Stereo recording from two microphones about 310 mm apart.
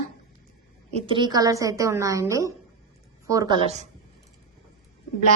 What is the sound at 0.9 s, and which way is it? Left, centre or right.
A woman's voice, centre.